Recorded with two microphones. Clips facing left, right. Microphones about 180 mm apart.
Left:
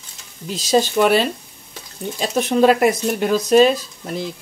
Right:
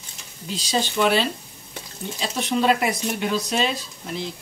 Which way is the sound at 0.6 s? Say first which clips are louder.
Left 7 dB; 45° left (ahead or behind).